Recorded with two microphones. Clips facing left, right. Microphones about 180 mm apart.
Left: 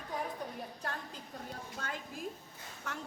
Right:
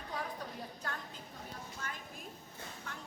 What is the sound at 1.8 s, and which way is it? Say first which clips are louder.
Speech: left 3 dB; 65° left (ahead or behind).